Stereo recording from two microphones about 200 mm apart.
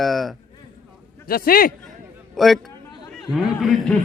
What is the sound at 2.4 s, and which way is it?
Speech, centre (ahead or behind).